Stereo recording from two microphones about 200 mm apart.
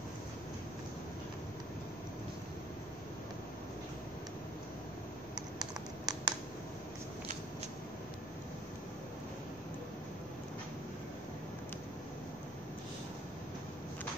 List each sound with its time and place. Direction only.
5.3 s computer keyboard: 20° right (ahead or behind)